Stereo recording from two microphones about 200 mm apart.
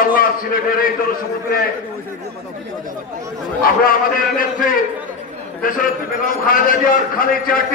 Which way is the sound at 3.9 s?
45° left (ahead or behind).